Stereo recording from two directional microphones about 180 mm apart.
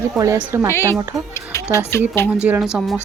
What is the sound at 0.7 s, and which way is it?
Speech, 15° left (ahead or behind).